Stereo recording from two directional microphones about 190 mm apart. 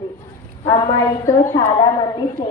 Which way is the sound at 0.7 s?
20° left (ahead or behind).